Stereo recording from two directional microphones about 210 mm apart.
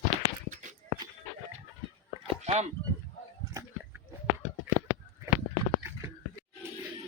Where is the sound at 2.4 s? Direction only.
30° right (ahead or behind).